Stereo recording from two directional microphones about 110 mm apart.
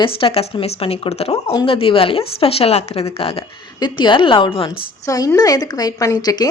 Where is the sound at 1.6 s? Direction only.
55° left (ahead or behind).